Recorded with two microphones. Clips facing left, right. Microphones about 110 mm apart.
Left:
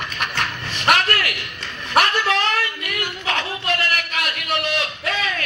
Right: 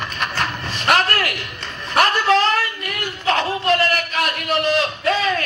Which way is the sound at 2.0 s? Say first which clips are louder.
Right 3 dB; 35° right (ahead or behind).